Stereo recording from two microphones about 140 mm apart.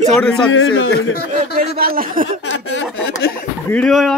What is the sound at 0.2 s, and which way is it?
Speech, 5° left (ahead or behind).